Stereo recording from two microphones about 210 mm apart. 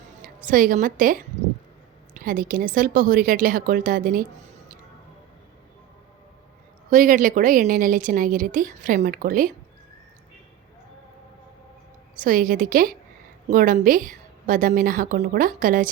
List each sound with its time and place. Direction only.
0.4 s a woman's voice: 40° right (ahead or behind)
6.9 s a woman's voice: 40° right (ahead or behind)
12.2 s a woman's voice: 40° right (ahead or behind)